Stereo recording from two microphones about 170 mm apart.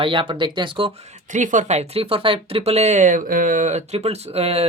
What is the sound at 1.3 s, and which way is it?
Speech, 45° right (ahead or behind).